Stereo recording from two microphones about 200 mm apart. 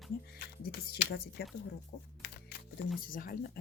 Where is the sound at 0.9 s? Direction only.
55° left (ahead or behind).